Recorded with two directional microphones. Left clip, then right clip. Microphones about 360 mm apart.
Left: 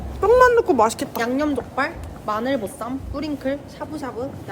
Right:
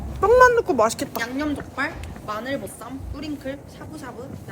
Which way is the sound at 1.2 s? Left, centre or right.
Centre.